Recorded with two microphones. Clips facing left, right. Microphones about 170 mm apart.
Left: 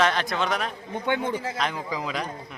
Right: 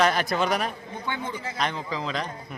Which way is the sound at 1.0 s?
60° left (ahead or behind).